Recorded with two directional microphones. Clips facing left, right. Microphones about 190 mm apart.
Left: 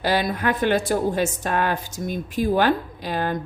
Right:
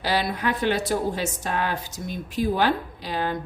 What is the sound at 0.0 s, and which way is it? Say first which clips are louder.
A woman's voice: left 3 dB; 50° left (ahead or behind).